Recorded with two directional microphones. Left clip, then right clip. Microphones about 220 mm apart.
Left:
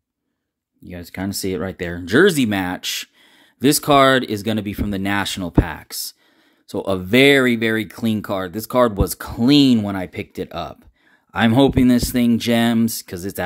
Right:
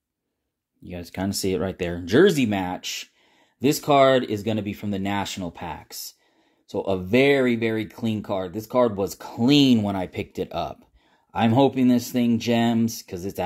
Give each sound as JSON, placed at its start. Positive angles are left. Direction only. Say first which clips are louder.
{"t": 0.8, "sound": "speech", "louder": "left 1 dB", "side_deg": 15}